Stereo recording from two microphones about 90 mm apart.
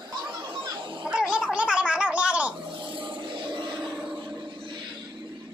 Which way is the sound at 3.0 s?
60° right (ahead or behind).